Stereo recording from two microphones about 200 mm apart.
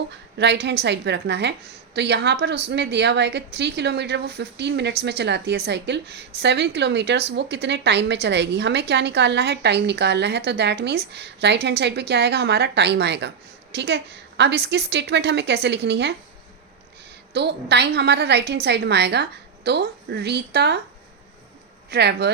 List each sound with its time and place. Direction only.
0.3 s a woman's voice: 60° right (ahead or behind)
17.3 s a woman's voice: 55° right (ahead or behind)
21.8 s speech: 55° right (ahead or behind)